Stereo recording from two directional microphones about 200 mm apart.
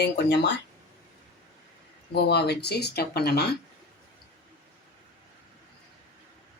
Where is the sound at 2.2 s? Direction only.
55° left (ahead or behind).